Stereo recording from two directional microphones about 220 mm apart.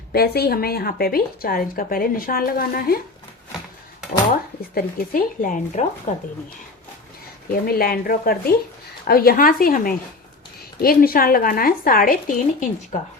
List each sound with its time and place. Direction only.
0.1 s speech: 45° left (ahead or behind)
4.7 s speech: 40° left (ahead or behind)
7.5 s speech: 40° left (ahead or behind)